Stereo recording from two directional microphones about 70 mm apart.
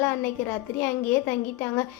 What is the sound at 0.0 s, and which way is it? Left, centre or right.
A woman's voice, left.